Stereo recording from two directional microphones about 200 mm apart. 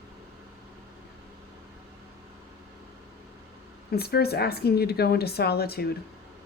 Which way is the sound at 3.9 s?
50° left (ahead or behind).